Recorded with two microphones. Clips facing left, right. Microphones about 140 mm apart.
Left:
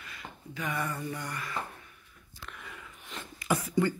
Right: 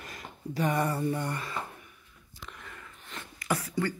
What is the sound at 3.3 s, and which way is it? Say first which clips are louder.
Speech: left 3 dB; 20° left (ahead or behind).